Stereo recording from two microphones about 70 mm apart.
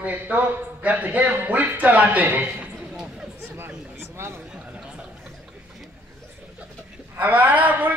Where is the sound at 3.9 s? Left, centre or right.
Right.